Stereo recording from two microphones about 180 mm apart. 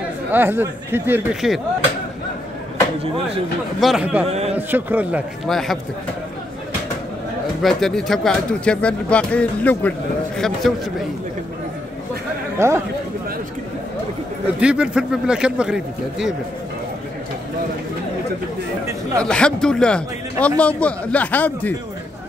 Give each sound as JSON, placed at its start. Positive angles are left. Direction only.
{"t": 0.3, "sound": "speech", "side_deg": -10}
{"t": 3.8, "sound": "speech", "side_deg": -5}
{"t": 4.3, "sound": "a man's voice", "side_deg": -35}
{"t": 4.6, "sound": "speech", "side_deg": -10}
{"t": 5.5, "sound": "speech", "side_deg": 0}
{"t": 7.6, "sound": "speech", "side_deg": 0}
{"t": 12.5, "sound": "speech", "side_deg": -15}
{"t": 14.6, "sound": "speech", "side_deg": -5}
{"t": 19.2, "sound": "a man's voice", "side_deg": 5}